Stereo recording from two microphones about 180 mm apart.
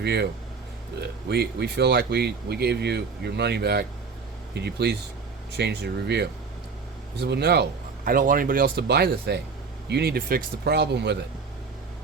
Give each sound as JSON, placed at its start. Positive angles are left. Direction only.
{"t": 0.0, "sound": "speech", "side_deg": -65}